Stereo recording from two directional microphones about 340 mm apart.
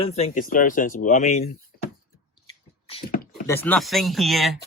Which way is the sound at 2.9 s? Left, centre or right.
Left.